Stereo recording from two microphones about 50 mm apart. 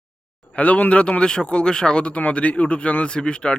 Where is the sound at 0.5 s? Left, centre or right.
Left.